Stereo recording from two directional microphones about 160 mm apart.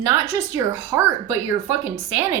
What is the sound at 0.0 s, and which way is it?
A woman's voice, 20° right (ahead or behind).